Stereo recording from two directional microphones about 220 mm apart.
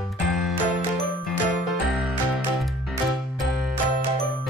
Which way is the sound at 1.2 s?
Centre (ahead or behind).